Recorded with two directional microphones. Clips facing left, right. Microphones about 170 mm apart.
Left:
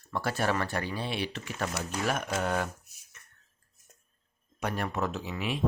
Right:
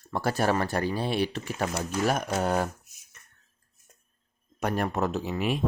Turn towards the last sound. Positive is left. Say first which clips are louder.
# right 5 dB
turn(degrees=-45)  # may be behind; listen again after turning